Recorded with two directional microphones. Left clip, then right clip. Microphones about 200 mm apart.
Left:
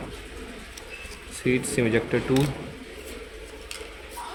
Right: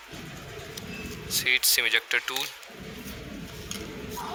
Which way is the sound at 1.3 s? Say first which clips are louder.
Right 2 dB; 45° right (ahead or behind).